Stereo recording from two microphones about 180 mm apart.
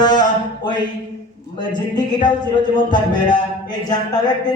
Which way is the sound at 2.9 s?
25° left (ahead or behind).